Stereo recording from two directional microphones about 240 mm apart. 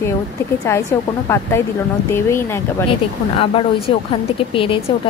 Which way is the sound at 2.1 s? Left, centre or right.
Centre.